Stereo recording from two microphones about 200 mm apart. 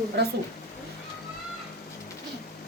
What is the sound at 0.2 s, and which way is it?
Speech, 55° right (ahead or behind).